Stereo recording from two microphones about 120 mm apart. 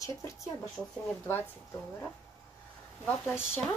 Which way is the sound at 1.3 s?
20° left (ahead or behind).